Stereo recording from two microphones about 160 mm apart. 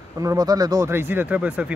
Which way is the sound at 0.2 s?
20° right (ahead or behind).